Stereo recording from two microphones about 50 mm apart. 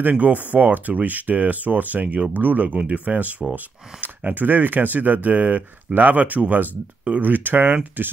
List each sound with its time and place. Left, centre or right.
0.0 s speech: right